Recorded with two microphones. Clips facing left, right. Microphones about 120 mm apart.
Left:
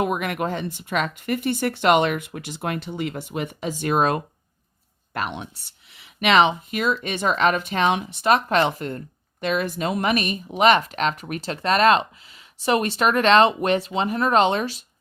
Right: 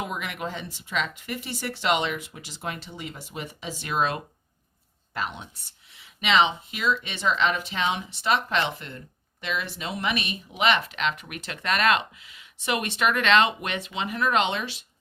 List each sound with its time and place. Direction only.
0.0 s speech: 55° left (ahead or behind)
5.1 s speech: 65° left (ahead or behind); by 14.8 s 40° left (ahead or behind)